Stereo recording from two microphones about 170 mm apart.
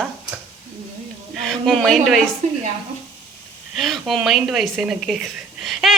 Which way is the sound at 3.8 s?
Centre (ahead or behind).